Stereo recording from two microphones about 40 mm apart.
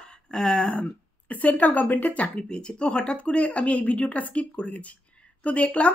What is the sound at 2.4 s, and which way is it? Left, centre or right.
Speech, left.